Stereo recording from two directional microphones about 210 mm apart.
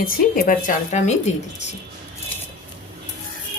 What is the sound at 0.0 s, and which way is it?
Speech, 45° left (ahead or behind).